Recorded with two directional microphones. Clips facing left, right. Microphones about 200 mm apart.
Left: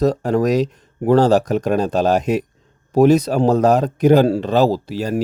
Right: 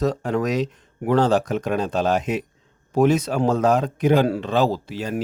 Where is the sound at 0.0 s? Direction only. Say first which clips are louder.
Left 5 dB; 40° left (ahead or behind).